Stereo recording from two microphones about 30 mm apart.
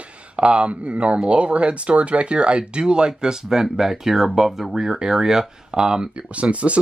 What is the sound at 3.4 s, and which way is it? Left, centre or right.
Speech, centre.